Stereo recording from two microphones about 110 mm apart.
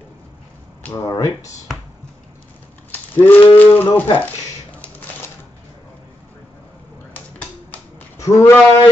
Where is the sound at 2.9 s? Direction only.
15° left (ahead or behind).